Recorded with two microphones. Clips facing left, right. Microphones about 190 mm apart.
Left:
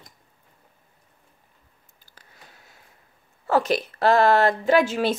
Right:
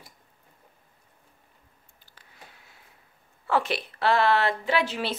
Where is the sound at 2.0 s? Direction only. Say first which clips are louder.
Even; 40° left (ahead or behind).